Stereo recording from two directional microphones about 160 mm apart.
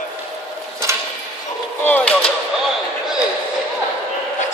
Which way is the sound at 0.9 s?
15° right (ahead or behind).